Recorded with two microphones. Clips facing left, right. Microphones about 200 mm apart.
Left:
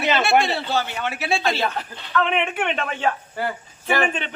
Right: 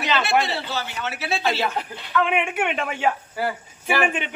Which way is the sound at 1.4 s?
10° right (ahead or behind).